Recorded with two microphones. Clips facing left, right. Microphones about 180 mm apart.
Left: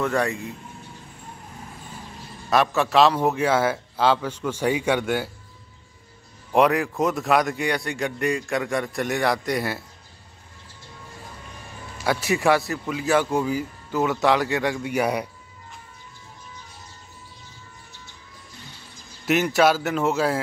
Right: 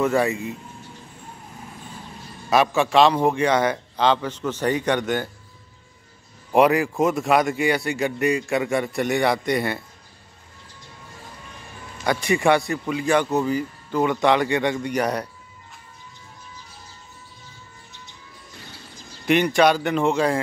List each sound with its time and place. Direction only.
0.0 s a man's voice: 5° right (ahead or behind)
2.5 s a man's voice: centre (ahead or behind)
6.5 s a man's voice: centre (ahead or behind)
12.0 s a man's voice: 5° left (ahead or behind)
19.2 s a man's voice: 5° left (ahead or behind)